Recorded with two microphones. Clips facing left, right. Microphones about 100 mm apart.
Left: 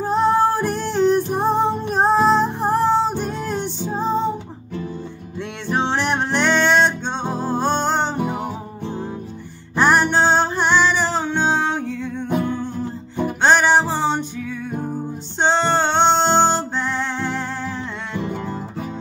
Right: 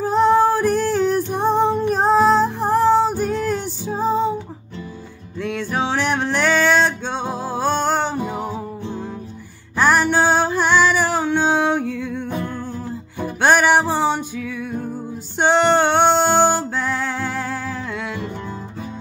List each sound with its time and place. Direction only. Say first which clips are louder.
0.0 s music: right 2 dB; centre (ahead or behind)
5.4 s music: even; centre (ahead or behind)
9.8 s music: even; centre (ahead or behind)
12.2 s music: left 4 dB; 20° left (ahead or behind)
13.4 s music: right 1 dB; 10° right (ahead or behind)